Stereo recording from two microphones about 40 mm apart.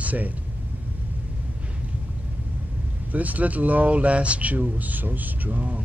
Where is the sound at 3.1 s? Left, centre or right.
Right.